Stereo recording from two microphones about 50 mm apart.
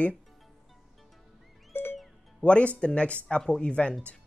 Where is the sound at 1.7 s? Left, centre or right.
Left.